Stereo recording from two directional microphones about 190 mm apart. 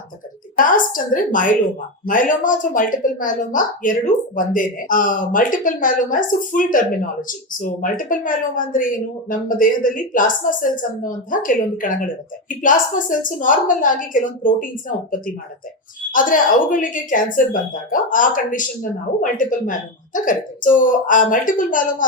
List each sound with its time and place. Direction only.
0.5 s speech: 45° left (ahead or behind)
16.1 s speech: 45° left (ahead or behind)